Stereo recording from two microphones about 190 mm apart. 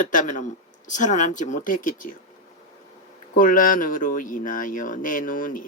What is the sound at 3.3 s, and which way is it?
Speech, 45° left (ahead or behind).